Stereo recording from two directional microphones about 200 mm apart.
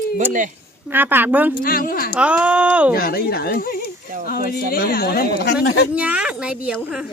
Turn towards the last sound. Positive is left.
turn(degrees=-5)  # may be behind; listen again after turning